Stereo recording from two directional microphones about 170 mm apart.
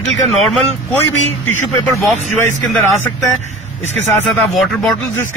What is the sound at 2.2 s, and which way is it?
Speech, 45° right (ahead or behind).